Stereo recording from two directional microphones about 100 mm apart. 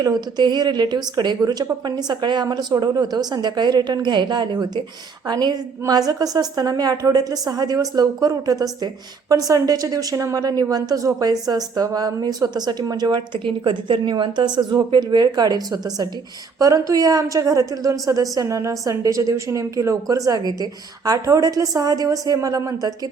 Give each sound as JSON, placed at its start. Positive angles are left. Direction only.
{"t": 0.0, "sound": "a woman's voice", "side_deg": -45}